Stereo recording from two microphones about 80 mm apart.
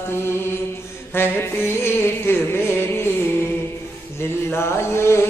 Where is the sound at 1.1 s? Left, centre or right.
Left.